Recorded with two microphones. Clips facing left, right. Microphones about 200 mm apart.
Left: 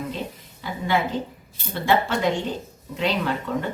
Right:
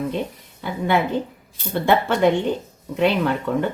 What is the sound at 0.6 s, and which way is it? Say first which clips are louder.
Speech: right 3 dB; 60° right (ahead or behind).